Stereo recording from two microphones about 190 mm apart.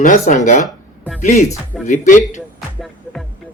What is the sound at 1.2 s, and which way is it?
Speech, 40° left (ahead or behind).